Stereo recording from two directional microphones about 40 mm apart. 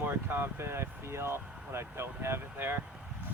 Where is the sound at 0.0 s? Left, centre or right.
Right.